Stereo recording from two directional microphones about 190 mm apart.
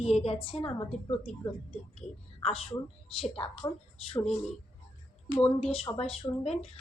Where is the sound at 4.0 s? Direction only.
30° left (ahead or behind).